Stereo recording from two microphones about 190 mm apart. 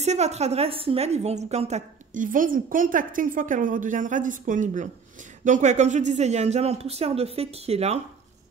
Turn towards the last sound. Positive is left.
turn(degrees=-35)  # may be behind; listen again after turning